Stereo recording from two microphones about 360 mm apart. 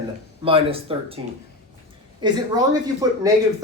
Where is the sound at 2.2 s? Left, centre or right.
Centre.